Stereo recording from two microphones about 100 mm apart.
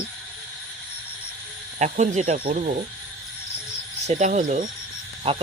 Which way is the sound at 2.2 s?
90° right.